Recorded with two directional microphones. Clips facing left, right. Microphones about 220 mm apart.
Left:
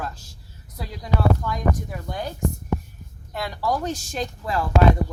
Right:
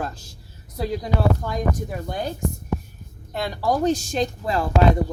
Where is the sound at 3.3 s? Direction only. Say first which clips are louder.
Right 3 dB; 25° right (ahead or behind).